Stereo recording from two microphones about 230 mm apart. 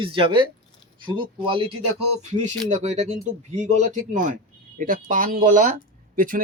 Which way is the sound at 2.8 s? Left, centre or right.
Right.